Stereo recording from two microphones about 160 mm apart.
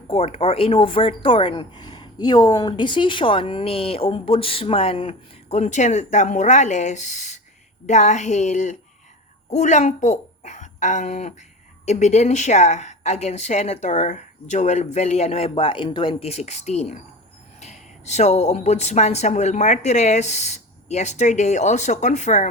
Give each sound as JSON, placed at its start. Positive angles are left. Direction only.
{"t": 0.1, "sound": "a woman's voice", "side_deg": 40}